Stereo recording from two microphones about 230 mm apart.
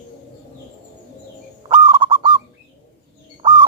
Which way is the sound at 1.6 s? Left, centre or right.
Right.